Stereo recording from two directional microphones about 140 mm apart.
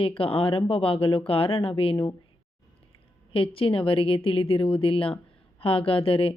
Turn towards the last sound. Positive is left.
turn(degrees=45)  # may be behind; listen again after turning